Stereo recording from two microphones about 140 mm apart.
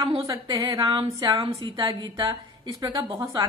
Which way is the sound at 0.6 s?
35° right (ahead or behind).